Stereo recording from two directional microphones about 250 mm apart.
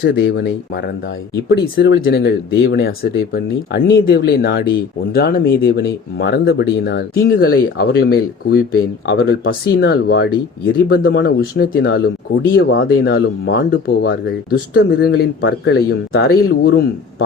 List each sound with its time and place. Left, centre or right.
0.0 s speech: left